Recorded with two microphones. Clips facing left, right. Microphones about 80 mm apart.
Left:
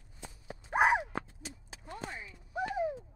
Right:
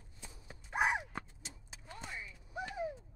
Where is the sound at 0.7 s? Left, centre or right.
Left.